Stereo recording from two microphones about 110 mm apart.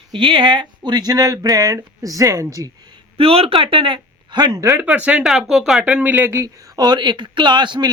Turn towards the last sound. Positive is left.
turn(degrees=-40)  # may be behind; listen again after turning